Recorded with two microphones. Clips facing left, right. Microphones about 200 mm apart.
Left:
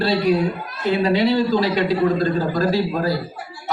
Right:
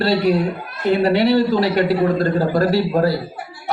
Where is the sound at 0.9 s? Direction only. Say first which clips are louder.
Right 3 dB; 55° right (ahead or behind).